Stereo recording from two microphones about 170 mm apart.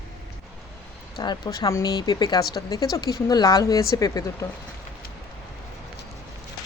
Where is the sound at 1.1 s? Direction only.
25° left (ahead or behind).